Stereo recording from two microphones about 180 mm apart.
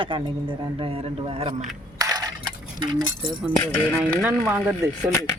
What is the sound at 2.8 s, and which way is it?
Speech, 25° right (ahead or behind).